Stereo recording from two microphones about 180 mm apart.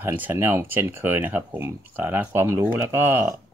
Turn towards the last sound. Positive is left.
turn(degrees=-15)  # may be behind; listen again after turning